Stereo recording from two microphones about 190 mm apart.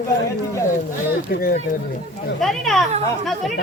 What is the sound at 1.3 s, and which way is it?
Speech, 50° left (ahead or behind).